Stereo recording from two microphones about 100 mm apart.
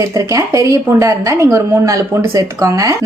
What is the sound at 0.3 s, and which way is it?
A woman's voice, 30° right (ahead or behind).